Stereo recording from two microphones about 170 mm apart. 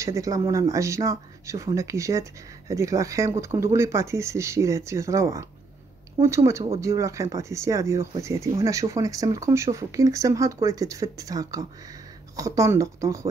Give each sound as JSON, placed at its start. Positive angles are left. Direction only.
{"t": 0.0, "sound": "speech", "side_deg": -20}